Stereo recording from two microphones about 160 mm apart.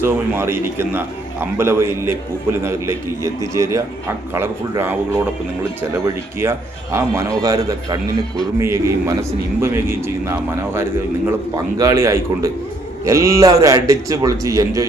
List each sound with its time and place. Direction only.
0.0 s a man's voice: 15° right (ahead or behind)
6.4 s a man's voice: 15° right (ahead or behind)